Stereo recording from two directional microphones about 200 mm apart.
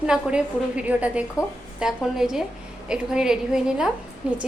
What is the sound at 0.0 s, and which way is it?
A woman's voice, 5° right (ahead or behind).